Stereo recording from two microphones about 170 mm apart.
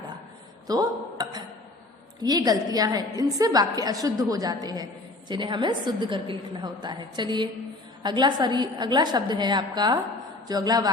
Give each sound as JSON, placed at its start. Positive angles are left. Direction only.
{"t": 0.7, "sound": "a woman's voice", "side_deg": -25}